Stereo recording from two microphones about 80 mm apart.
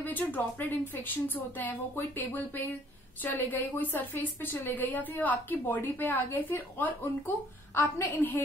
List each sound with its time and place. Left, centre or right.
0.0 s a woman's voice: left